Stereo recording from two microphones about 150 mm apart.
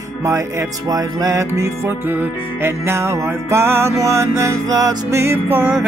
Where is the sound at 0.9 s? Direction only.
20° right (ahead or behind).